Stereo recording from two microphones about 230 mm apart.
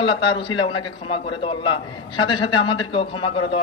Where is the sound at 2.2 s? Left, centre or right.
Left.